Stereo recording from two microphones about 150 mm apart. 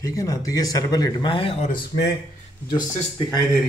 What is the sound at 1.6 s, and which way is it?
Speech, 90° left.